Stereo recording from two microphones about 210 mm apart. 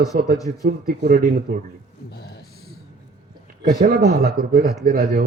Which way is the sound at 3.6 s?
45° right (ahead or behind).